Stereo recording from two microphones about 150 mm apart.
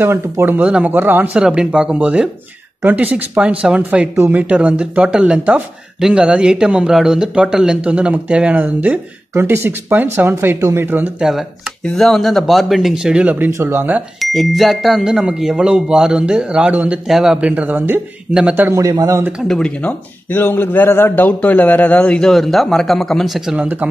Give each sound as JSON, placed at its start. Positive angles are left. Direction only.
{"t": 0.0, "sound": "speech", "side_deg": -15}
{"t": 11.2, "sound": "speech", "side_deg": 0}
{"t": 14.2, "sound": "a man's voice", "side_deg": 0}
{"t": 19.4, "sound": "speech", "side_deg": 5}